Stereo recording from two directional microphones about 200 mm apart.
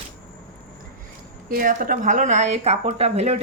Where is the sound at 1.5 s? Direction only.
45° right (ahead or behind).